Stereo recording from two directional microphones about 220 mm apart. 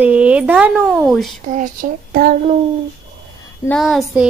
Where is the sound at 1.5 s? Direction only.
40° right (ahead or behind).